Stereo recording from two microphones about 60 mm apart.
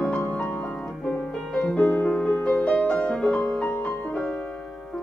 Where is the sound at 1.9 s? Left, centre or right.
Left.